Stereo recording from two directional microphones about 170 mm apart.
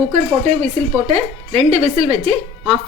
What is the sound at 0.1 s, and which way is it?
Speech, 45° right (ahead or behind).